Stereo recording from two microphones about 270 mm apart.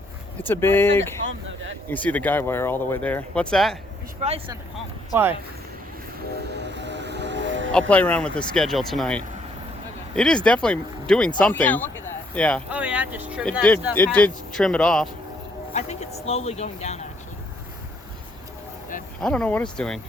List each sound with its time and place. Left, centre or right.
0.4 s speech: centre
4.2 s speech: right
6.5 s music: right
7.7 s speech: centre
15.7 s speech: left
19.2 s speech: centre